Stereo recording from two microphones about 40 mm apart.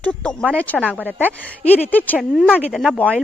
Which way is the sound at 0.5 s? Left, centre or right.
Left.